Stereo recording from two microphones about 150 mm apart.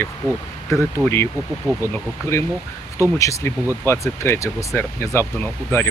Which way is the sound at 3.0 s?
20° left (ahead or behind).